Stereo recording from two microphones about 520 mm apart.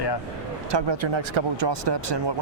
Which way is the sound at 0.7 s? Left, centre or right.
Right.